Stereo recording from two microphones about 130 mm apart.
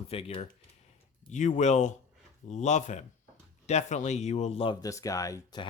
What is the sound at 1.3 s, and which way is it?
A man's voice, 70° left (ahead or behind).